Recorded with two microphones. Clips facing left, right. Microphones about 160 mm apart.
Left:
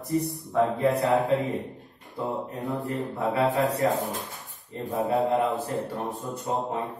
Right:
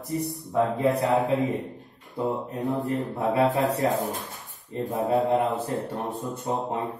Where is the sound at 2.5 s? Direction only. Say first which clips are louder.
Right 3 dB; 20° right (ahead or behind).